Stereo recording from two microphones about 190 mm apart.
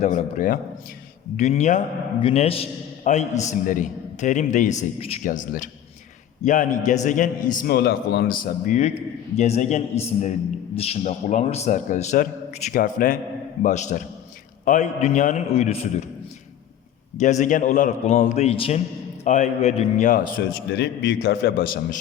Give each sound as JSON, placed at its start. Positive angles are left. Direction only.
{"t": 0.0, "sound": "a man's voice", "side_deg": 40}
{"t": 17.2, "sound": "a man's voice", "side_deg": 40}